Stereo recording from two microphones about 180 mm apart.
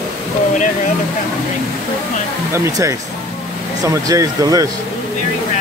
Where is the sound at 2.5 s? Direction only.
15° right (ahead or behind).